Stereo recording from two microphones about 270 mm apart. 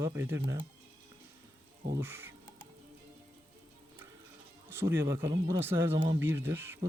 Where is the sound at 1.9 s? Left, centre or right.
Centre.